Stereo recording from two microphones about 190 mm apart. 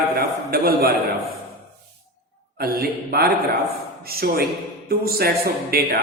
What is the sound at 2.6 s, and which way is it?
A man's voice, 55° right (ahead or behind).